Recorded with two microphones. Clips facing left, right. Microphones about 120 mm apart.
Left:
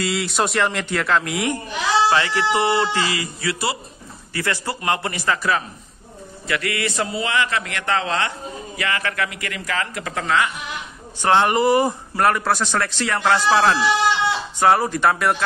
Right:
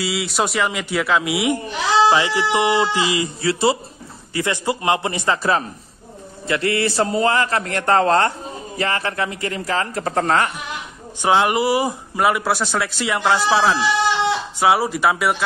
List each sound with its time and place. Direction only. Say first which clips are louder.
0.0 s a man's voice: even; 5° right (ahead or behind); by 10.5 s 40° right (ahead or behind)
11.2 s a man's voice: even; 5° right (ahead or behind)